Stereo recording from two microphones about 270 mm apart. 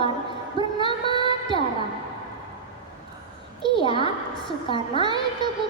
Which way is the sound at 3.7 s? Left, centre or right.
Centre.